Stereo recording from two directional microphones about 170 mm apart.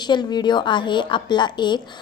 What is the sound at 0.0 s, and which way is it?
A woman's voice, 25° left (ahead or behind).